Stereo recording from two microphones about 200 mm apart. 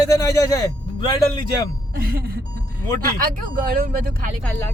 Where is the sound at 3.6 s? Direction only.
45° right (ahead or behind).